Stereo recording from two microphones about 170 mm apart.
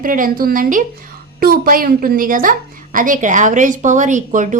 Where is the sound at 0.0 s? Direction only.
55° right (ahead or behind).